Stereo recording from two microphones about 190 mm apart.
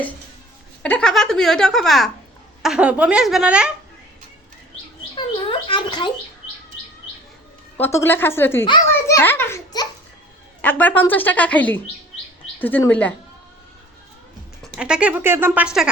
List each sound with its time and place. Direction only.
0.8 s speech: 5° left (ahead or behind)
5.1 s a sound: 25° left (ahead or behind)
7.8 s a woman's voice: 15° left (ahead or behind)
14.8 s speech: 5° right (ahead or behind)